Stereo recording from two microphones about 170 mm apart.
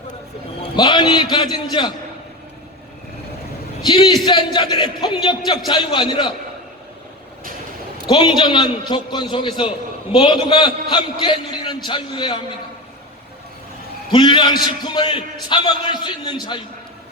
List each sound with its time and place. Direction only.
0.8 s a man's voice: 25° left (ahead or behind)
3.8 s a man's voice: 25° left (ahead or behind)
8.0 s a man's voice: 30° left (ahead or behind)
14.1 s a man's voice: 30° left (ahead or behind)